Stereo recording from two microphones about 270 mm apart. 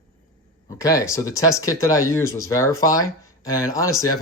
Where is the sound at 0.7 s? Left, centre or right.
Centre.